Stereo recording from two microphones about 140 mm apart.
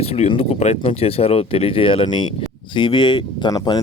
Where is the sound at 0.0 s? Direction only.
45° left (ahead or behind).